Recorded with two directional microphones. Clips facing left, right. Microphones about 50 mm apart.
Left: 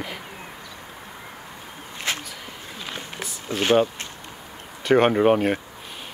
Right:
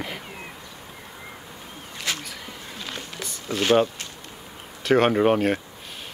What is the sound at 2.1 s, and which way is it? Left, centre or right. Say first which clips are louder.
Speech: left 1 dB; left.